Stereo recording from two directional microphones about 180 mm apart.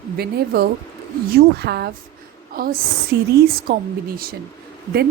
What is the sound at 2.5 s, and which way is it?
Speech, 55° right (ahead or behind).